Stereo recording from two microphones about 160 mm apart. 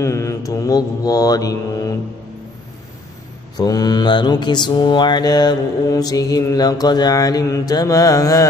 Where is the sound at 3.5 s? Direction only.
25° left (ahead or behind).